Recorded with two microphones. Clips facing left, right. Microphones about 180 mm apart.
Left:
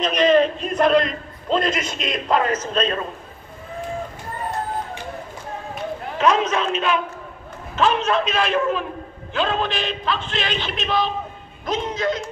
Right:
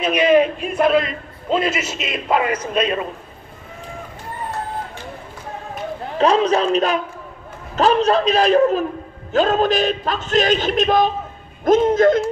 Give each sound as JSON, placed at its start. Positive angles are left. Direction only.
{"t": 0.0, "sound": "a man's voice", "side_deg": -10}
{"t": 6.1, "sound": "a man's voice", "side_deg": -35}